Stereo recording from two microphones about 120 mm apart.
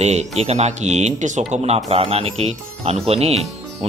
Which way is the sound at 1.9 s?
55° right (ahead or behind).